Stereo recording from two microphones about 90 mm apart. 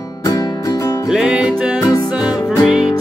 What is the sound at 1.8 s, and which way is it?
Music, 45° left (ahead or behind).